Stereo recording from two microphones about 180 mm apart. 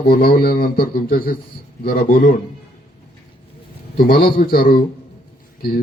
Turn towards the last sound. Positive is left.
turn(degrees=55)  # may be behind; listen again after turning